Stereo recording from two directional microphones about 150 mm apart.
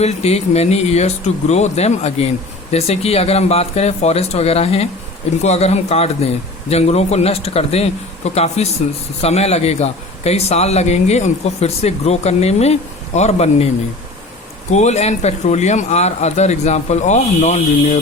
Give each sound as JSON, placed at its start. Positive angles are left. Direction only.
{"t": 0.0, "sound": "a man's voice", "side_deg": 45}
{"t": 14.7, "sound": "a man's voice", "side_deg": 50}